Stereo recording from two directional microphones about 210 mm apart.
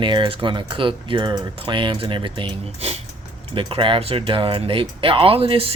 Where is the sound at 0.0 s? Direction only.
25° right (ahead or behind).